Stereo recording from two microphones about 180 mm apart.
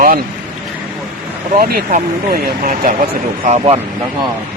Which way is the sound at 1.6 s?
55° right (ahead or behind).